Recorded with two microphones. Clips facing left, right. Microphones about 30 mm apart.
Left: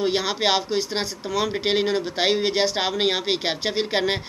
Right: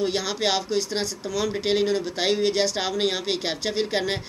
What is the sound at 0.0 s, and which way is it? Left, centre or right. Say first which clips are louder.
Speech: left 2 dB; left.